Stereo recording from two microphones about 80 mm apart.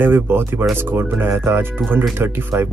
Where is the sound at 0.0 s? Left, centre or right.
Right.